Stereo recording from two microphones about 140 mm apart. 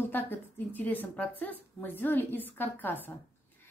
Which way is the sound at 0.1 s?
15° left (ahead or behind).